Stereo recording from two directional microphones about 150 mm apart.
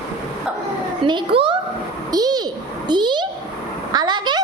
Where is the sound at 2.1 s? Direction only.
25° right (ahead or behind).